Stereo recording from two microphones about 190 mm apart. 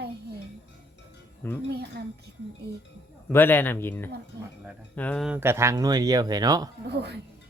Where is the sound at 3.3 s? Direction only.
10° left (ahead or behind).